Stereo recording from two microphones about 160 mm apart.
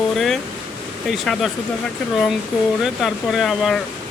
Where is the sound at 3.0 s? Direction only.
Centre (ahead or behind).